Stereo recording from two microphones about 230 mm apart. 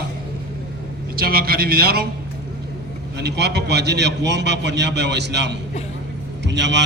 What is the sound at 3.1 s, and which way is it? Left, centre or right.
A man's voice, right.